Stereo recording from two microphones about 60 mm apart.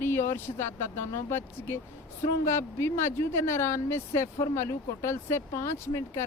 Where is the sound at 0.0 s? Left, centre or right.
Left.